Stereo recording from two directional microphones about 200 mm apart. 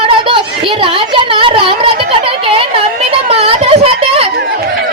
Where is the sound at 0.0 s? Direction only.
25° right (ahead or behind).